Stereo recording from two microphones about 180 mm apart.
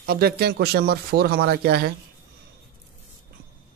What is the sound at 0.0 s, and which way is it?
Speech, 60° right (ahead or behind).